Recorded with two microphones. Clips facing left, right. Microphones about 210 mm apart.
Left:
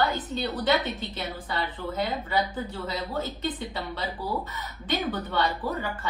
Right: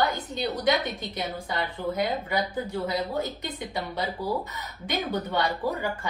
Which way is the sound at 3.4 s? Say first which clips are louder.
Left 1 dB; 10° right (ahead or behind).